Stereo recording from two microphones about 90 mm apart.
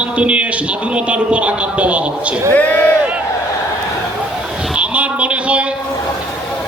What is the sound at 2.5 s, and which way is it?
Speech, 20° left (ahead or behind).